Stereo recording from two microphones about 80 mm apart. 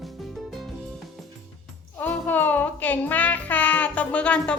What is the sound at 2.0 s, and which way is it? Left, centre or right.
Music, left.